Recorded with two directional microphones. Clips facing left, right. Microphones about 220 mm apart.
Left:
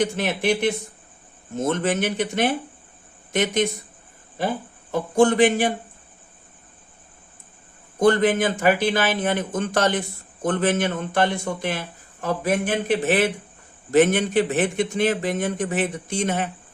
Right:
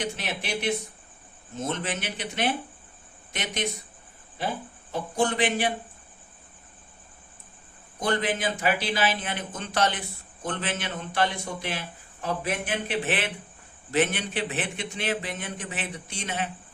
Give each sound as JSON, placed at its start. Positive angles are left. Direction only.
{"t": 0.0, "sound": "a man's voice", "side_deg": 50}
{"t": 4.9, "sound": "a man's voice", "side_deg": 50}
{"t": 7.9, "sound": "a man's voice", "side_deg": 50}